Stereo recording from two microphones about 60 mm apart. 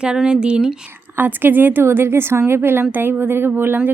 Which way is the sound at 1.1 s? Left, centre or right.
Right.